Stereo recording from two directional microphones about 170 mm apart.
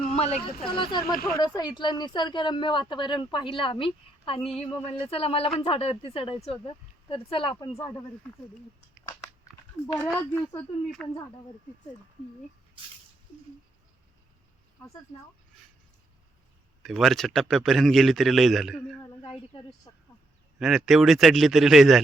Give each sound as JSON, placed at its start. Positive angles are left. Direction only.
{"t": 0.1, "sound": "a woman's voice", "side_deg": 40}
{"t": 10.5, "sound": "a man's voice", "side_deg": 5}
{"t": 12.8, "sound": "a sound", "side_deg": -30}
{"t": 14.8, "sound": "speech", "side_deg": 10}
{"t": 16.8, "sound": "a man's voice", "side_deg": 0}
{"t": 19.9, "sound": "a woman's voice", "side_deg": 30}
{"t": 20.6, "sound": "a man's voice", "side_deg": 0}